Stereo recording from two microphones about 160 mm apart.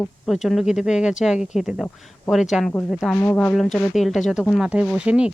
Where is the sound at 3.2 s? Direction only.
10° left (ahead or behind).